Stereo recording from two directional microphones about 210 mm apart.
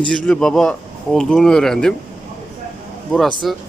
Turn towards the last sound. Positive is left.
turn(degrees=0)  # may be behind; listen again after turning